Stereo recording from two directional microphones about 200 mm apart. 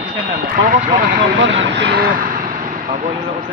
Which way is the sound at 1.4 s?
55° right (ahead or behind).